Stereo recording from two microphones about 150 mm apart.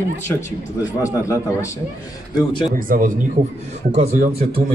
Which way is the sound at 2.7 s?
70° right (ahead or behind).